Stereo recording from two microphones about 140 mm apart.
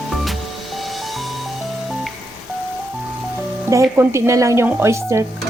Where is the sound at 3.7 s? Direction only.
20° right (ahead or behind).